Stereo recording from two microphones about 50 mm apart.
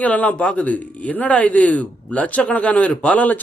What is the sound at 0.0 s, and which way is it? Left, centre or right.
Speech, left.